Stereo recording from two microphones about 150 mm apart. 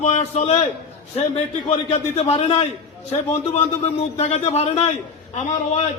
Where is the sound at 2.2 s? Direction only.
40° left (ahead or behind).